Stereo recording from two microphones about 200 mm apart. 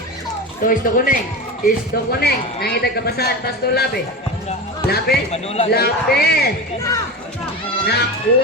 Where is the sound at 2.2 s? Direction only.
50° left (ahead or behind).